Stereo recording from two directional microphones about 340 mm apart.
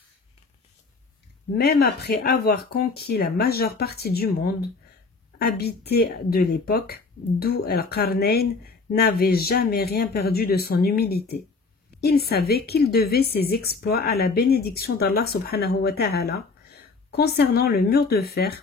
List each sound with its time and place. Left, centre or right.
1.6 s a woman's voice: left